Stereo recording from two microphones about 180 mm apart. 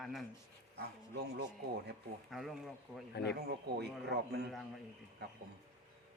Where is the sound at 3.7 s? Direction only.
65° right (ahead or behind).